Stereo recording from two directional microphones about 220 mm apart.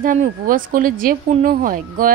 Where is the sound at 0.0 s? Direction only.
40° right (ahead or behind).